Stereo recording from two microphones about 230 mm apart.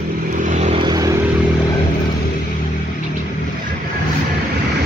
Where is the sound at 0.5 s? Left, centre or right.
Right.